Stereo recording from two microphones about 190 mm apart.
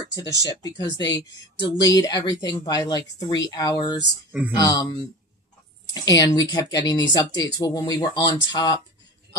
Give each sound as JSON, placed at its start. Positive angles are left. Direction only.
{"t": 0.1, "sound": "speech", "side_deg": 20}
{"t": 4.3, "sound": "speech", "side_deg": -10}
{"t": 4.6, "sound": "speech", "side_deg": 20}
{"t": 5.9, "sound": "speech", "side_deg": 20}